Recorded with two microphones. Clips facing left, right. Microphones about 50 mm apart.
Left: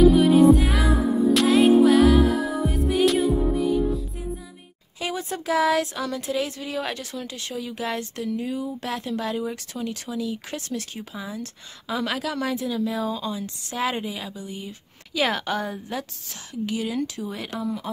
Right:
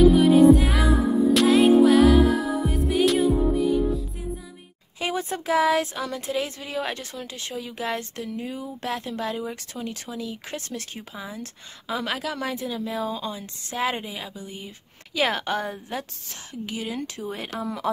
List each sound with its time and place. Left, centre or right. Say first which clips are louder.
0.0 s music: even; centre
5.3 s speech: even; centre
7.0 s speech: left 2 dB; right
7.5 s speech: even; centre
8.9 s speech: left 1 dB; centre
15.9 s a woman's voice: left 1 dB; right
16.6 s speech: left 5 dB; centre
17.6 s speech: left 3 dB; right